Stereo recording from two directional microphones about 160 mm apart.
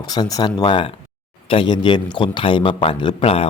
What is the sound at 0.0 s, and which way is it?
A man's voice, 25° left (ahead or behind).